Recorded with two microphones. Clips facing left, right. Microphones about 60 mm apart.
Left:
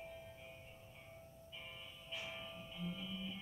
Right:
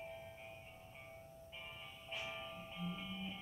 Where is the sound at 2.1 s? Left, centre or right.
Right.